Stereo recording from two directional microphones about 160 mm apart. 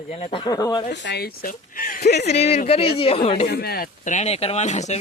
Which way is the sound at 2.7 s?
35° left (ahead or behind).